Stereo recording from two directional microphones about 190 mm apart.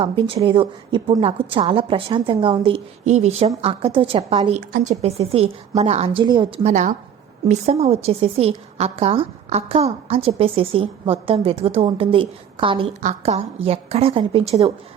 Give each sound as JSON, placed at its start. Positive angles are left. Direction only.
{"t": 0.0, "sound": "a woman's voice", "side_deg": -25}
{"t": 13.0, "sound": "a woman's voice", "side_deg": -40}